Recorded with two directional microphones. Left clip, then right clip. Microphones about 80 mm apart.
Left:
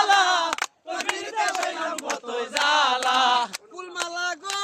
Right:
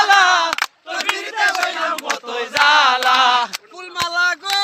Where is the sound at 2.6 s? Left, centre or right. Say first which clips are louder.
Right 8 dB; right.